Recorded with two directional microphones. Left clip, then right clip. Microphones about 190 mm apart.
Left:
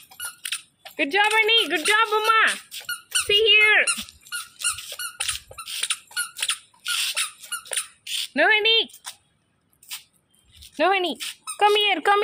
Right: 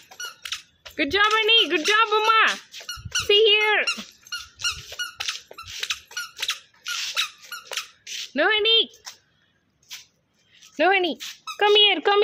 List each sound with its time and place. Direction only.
0.4 s squeak: 15° left (ahead or behind)
0.9 s a woman's voice: 20° right (ahead or behind)
2.7 s squeak: 10° left (ahead or behind)
3.2 s speech: 15° right (ahead or behind)
3.8 s squeak: 10° left (ahead or behind)
6.8 s squeak: 55° left (ahead or behind)
8.0 s a sound: 55° left (ahead or behind)
8.3 s speech: 15° right (ahead or behind)
10.8 s a woman's voice: 20° right (ahead or behind)